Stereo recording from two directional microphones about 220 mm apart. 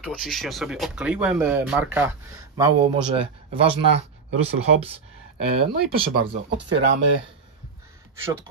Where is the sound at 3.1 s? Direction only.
25° right (ahead or behind).